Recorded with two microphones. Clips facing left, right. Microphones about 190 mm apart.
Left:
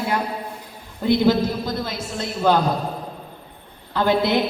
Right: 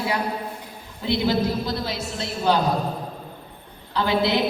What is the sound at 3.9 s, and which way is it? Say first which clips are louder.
Speech: left 2 dB; 50° left (ahead or behind).